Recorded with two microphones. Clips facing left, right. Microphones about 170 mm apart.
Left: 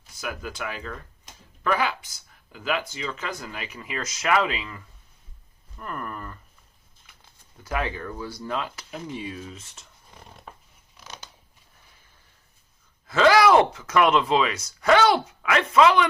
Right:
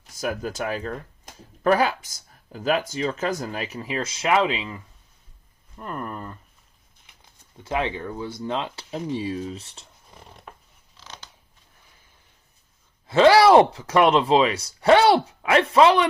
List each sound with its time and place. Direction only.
0.1 s speech: 40° right (ahead or behind); by 6.4 s 25° right (ahead or behind)
7.6 s speech: 25° right (ahead or behind)
11.0 s scissors: 15° left (ahead or behind)
13.1 s speech: 30° right (ahead or behind)